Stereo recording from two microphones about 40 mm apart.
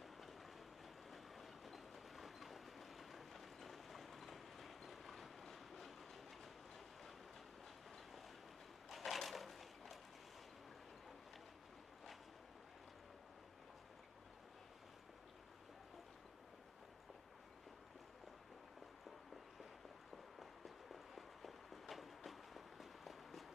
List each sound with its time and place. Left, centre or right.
0.0 s train: centre
8.8 s a sound: centre
20.3 s walk: centre